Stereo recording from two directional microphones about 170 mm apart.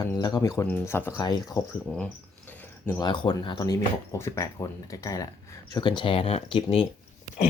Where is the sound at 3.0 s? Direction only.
25° left (ahead or behind).